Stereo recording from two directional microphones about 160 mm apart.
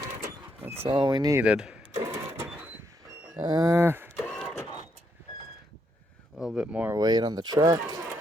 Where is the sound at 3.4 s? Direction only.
25° right (ahead or behind).